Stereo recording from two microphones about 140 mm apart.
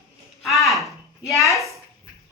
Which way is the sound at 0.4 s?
Centre (ahead or behind).